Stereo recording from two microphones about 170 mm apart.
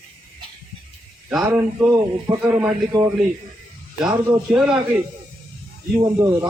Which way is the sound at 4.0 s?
5° right (ahead or behind).